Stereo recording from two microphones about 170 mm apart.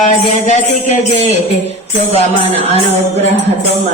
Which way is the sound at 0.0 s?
45° left (ahead or behind).